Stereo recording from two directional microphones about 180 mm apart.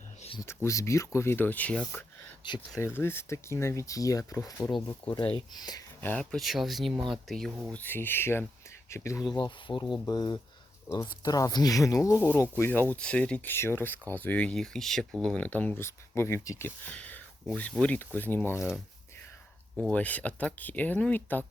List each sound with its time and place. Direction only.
0.4 s speech: 15° left (ahead or behind)
2.4 s speech: 25° left (ahead or behind)
2.8 s speech: 15° left (ahead or behind)
6.0 s speech: 10° left (ahead or behind)
19.9 s speech: 10° left (ahead or behind)